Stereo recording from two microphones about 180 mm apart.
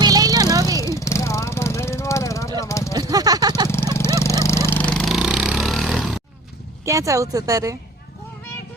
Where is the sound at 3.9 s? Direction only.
15° left (ahead or behind); by 6.2 s centre (ahead or behind).